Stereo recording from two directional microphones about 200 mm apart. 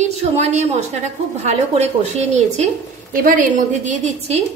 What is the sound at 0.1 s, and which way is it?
A woman's voice, 35° right (ahead or behind).